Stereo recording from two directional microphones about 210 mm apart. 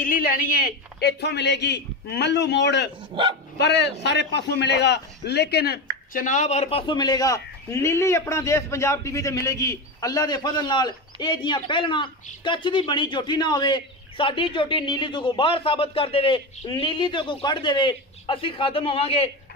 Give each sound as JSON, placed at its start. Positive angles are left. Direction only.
{"t": 0.0, "sound": "a man's voice", "side_deg": 40}
{"t": 6.1, "sound": "a man's voice", "side_deg": 35}